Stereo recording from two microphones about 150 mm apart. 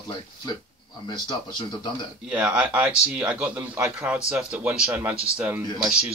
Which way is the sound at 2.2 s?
10° right (ahead or behind).